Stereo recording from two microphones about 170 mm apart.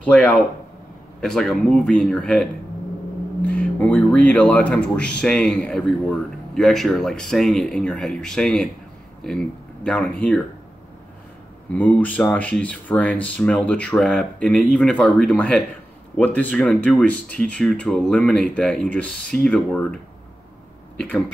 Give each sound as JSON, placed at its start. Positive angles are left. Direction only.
{"t": 0.0, "sound": "speech", "side_deg": 5}
{"t": 3.4, "sound": "speech", "side_deg": 10}
{"t": 11.7, "sound": "speech", "side_deg": 10}